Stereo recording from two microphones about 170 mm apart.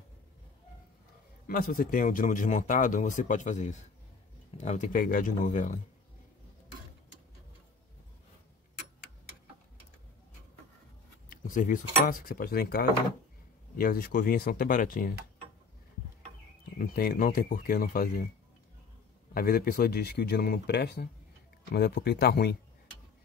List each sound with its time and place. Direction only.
1.5 s speech: 55° left (ahead or behind)
11.2 s speech: 50° left (ahead or behind)
16.7 s speech: 60° left (ahead or behind)
19.3 s speech: 60° left (ahead or behind)